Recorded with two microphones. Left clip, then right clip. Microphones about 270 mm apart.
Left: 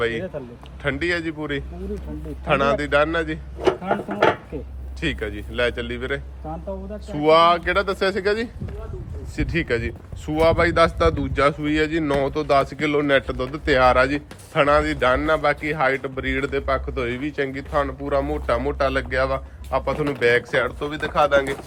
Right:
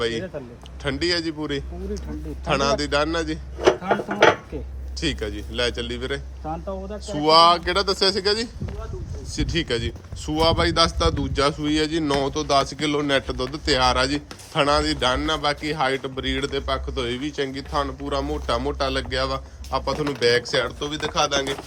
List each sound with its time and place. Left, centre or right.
0.0 s speech: centre
3.6 s speech: right
4.9 s speech: centre